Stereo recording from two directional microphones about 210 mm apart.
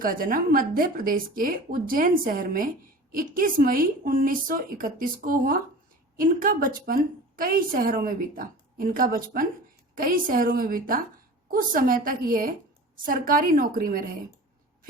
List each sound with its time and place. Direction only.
0.0 s a woman's voice: 40° right (ahead or behind)